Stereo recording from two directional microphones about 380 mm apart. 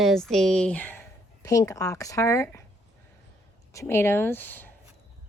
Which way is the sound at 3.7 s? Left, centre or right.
Centre.